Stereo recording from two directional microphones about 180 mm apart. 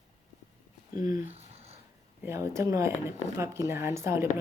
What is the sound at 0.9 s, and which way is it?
Speech, 20° right (ahead or behind).